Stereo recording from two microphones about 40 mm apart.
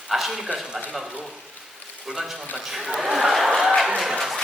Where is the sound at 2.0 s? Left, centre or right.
Centre.